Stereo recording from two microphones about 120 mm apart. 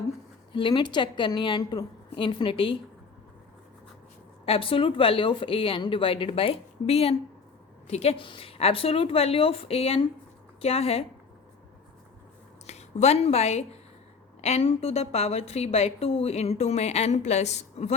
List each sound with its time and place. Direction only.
0.5 s a woman's voice: 40° left (ahead or behind)
4.4 s a woman's voice: 50° left (ahead or behind)
12.6 s a woman's voice: 65° left (ahead or behind)